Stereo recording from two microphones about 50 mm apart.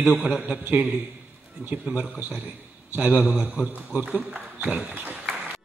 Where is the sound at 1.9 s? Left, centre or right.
Right.